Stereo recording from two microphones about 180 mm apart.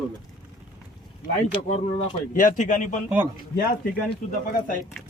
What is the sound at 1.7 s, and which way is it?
A man's voice, 45° left (ahead or behind).